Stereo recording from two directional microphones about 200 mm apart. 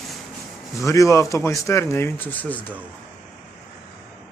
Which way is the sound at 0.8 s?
15° left (ahead or behind).